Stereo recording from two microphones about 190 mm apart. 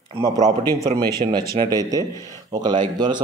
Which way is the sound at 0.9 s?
25° right (ahead or behind).